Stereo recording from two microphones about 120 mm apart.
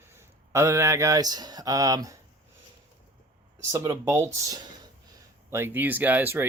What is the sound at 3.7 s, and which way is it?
Speech, 25° right (ahead or behind).